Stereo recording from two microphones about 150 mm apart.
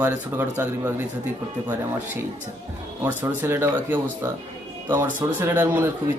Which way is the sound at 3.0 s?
15° right (ahead or behind).